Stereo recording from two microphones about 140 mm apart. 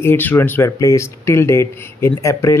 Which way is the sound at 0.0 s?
15° left (ahead or behind).